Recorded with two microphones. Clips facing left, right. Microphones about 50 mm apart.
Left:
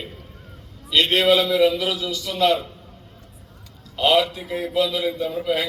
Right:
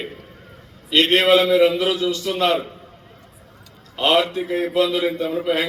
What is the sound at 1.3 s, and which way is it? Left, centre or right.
A man's voice, right.